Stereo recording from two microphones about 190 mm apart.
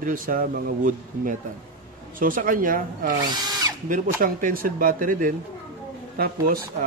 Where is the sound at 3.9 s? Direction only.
45° right (ahead or behind).